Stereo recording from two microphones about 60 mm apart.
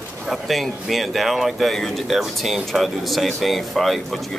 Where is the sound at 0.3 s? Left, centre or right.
Centre.